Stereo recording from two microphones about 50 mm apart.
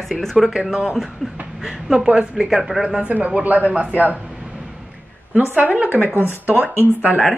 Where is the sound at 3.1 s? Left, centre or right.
Right.